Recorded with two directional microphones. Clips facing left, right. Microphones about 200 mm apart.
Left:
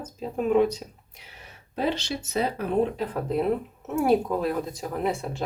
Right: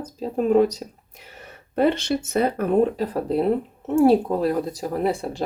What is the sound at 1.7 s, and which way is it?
Speech, 55° right (ahead or behind).